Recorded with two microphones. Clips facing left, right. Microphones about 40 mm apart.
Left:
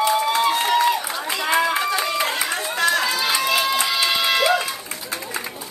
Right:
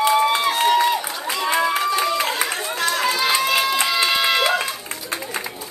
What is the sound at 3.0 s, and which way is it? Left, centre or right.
Music, right.